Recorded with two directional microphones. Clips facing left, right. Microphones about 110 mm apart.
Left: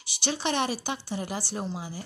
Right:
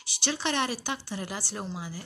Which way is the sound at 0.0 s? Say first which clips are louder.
Left 1 dB; 20° left (ahead or behind).